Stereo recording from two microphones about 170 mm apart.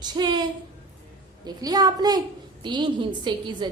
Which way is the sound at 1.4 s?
25° right (ahead or behind).